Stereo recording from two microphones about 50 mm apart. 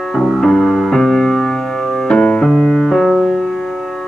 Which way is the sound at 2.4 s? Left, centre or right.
Centre.